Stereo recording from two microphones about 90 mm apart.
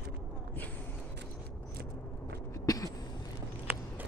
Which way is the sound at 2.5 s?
40° left (ahead or behind).